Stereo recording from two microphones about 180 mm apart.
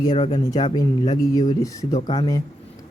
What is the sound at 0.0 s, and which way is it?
A man's voice, 20° left (ahead or behind).